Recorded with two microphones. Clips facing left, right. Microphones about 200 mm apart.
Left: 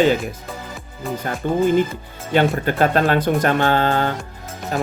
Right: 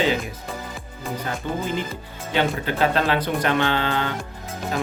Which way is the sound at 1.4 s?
50° left (ahead or behind).